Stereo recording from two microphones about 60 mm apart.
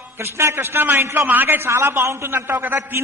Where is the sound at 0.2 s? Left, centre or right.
Right.